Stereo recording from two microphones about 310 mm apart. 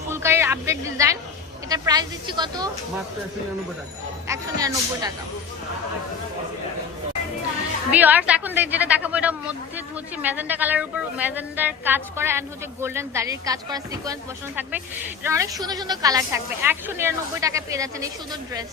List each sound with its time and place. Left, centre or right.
0.1 s a woman's voice: centre
4.3 s a woman's voice: centre
7.9 s a woman's voice: centre